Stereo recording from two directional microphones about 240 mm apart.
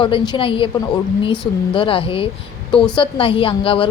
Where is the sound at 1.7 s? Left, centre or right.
Left.